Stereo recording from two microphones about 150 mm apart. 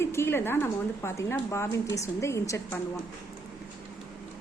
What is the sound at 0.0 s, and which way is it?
A woman's voice, 15° left (ahead or behind).